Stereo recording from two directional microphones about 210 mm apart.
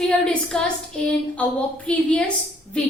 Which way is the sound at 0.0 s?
5° left (ahead or behind).